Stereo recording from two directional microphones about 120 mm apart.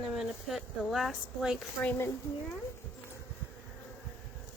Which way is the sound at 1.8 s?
15° left (ahead or behind).